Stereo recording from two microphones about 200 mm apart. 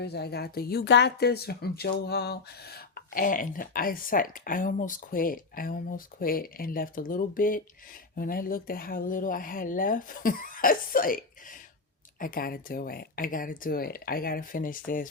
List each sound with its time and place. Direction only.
0.0 s speech: 55° left (ahead or behind)